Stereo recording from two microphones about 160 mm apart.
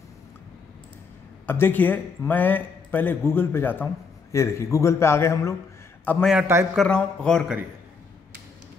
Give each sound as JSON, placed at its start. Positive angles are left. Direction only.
{"t": 1.4, "sound": "speech", "side_deg": 10}
{"t": 6.4, "sound": "a man's voice", "side_deg": -15}
{"t": 6.7, "sound": "speech", "side_deg": 5}